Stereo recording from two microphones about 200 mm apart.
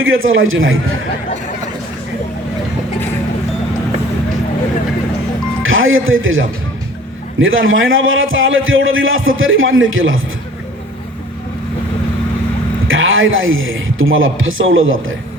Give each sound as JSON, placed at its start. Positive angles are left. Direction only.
{"t": 0.0, "sound": "a man's voice", "side_deg": -85}
{"t": 5.6, "sound": "a man's voice", "side_deg": -80}
{"t": 12.9, "sound": "a man's voice", "side_deg": -80}